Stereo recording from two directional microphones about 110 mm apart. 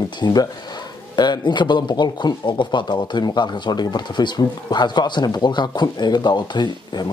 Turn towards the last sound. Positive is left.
turn(degrees=40)  # may be behind; listen again after turning